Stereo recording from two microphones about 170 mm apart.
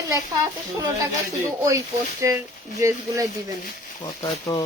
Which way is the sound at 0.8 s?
15° right (ahead or behind).